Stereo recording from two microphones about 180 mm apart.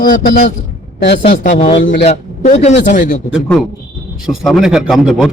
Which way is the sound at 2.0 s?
35° left (ahead or behind).